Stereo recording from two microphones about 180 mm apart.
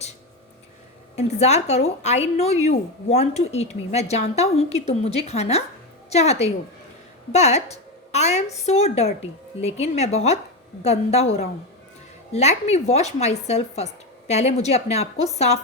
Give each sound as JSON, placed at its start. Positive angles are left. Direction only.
{"t": 1.1, "sound": "a woman's voice", "side_deg": 35}